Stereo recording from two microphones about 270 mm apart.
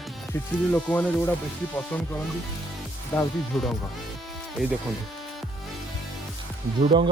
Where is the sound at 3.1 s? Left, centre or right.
Centre.